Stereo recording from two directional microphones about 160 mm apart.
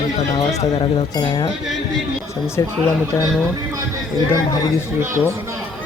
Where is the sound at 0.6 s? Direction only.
25° left (ahead or behind).